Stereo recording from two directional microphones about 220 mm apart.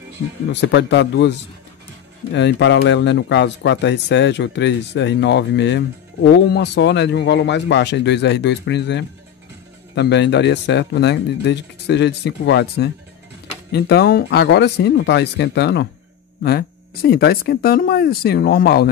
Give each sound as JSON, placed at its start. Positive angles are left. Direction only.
{"t": 0.5, "sound": "speech", "side_deg": 50}